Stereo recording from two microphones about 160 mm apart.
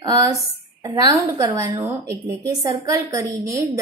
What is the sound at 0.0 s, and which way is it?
Speech, 20° right (ahead or behind).